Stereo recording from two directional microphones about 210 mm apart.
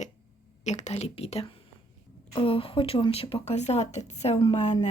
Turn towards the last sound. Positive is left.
turn(degrees=30)  # may be behind; listen again after turning